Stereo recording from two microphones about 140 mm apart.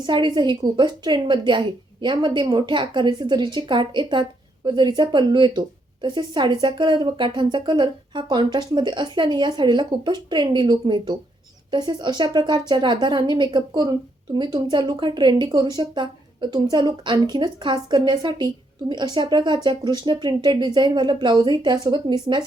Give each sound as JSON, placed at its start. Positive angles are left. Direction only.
{"t": 0.0, "sound": "a woman's voice", "side_deg": -35}